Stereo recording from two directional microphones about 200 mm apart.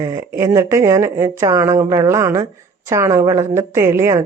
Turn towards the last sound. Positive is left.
turn(degrees=-15)  # may be behind; listen again after turning